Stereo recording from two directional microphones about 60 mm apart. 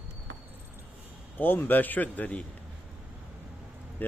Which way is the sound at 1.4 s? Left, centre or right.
Left.